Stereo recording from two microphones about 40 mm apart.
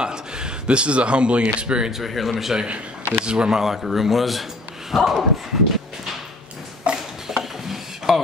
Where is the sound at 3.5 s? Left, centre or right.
Centre.